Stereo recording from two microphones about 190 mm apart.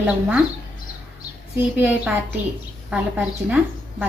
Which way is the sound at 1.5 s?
10° right (ahead or behind).